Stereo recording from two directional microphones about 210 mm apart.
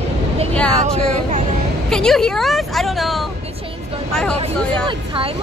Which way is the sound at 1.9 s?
5° left (ahead or behind).